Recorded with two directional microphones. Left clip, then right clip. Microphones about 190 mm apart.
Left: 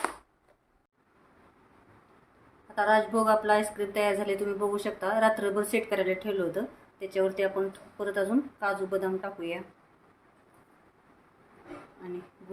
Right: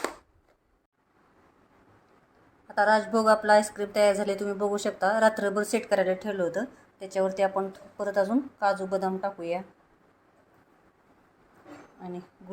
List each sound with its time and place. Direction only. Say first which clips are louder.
2.7 s a woman's voice: right 2 dB; 30° right (ahead or behind)